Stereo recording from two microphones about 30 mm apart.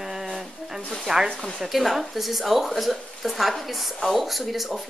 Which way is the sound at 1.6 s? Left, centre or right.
Centre.